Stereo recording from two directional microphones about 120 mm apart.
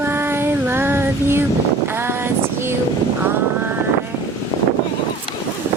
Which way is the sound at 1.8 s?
20° right (ahead or behind).